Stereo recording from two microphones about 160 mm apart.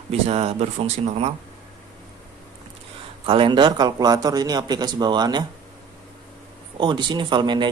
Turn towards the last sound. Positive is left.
turn(degrees=-30)  # may be behind; listen again after turning